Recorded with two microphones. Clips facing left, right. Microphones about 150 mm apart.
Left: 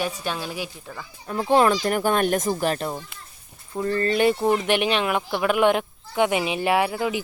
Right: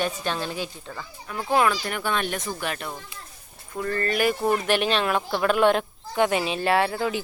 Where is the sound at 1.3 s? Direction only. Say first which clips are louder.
Left 4 dB; 30° left (ahead or behind).